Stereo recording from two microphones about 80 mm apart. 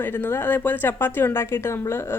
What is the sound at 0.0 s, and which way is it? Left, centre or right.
Speech, left.